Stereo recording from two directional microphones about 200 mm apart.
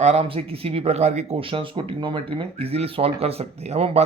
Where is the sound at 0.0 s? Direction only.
30° right (ahead or behind).